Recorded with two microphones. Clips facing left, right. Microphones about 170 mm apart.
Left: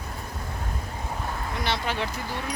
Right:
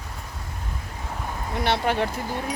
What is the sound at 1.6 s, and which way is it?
Speech, 60° right (ahead or behind).